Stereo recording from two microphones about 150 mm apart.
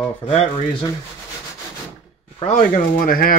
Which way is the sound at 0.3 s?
45° left (ahead or behind).